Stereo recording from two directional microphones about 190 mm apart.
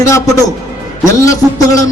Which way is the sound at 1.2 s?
15° left (ahead or behind).